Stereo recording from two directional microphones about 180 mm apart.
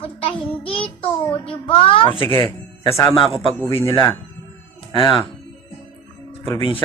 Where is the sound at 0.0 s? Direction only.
30° left (ahead or behind).